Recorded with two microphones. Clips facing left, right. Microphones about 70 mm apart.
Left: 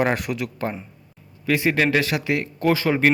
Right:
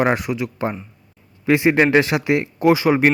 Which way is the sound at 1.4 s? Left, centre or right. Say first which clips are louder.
Right 5 dB; right.